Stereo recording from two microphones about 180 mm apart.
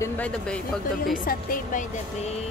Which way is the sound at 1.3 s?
40° left (ahead or behind).